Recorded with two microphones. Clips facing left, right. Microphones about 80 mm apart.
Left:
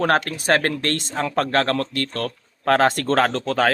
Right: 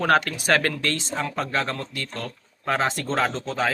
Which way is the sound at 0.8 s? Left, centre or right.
Left.